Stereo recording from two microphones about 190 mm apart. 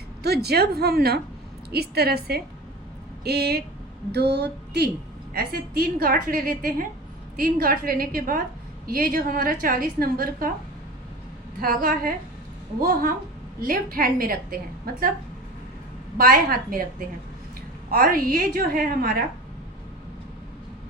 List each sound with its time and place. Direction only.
0.2 s a woman's voice: 60° right (ahead or behind)
11.6 s a woman's voice: 50° right (ahead or behind)
13.6 s a woman's voice: 50° right (ahead or behind)
16.1 s a woman's voice: 50° right (ahead or behind)
17.9 s a woman's voice: 50° right (ahead or behind)